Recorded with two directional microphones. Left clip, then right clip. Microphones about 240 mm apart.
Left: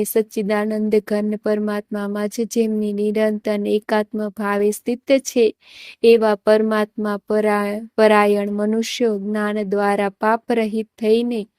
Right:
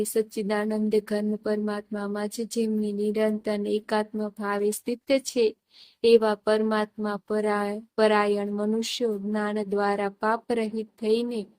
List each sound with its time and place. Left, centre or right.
0.0 s speech: left